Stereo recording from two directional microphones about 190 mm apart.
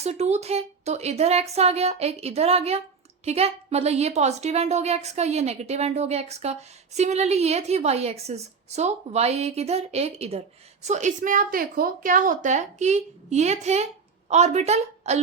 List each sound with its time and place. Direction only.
0.0 s a woman's voice: 35° right (ahead or behind)